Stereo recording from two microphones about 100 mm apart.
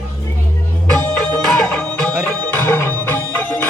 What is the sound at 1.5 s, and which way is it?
Music, 15° left (ahead or behind).